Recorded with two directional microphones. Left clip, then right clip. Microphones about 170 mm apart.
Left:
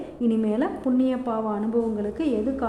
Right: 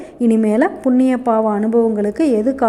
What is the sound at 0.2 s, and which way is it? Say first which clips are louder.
A woman's voice: right 10 dB; 40° right (ahead or behind).